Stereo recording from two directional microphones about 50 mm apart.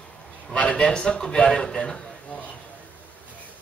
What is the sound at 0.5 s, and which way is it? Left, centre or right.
A man's voice, left.